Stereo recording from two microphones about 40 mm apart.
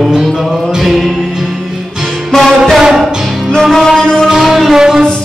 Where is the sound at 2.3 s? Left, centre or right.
Centre.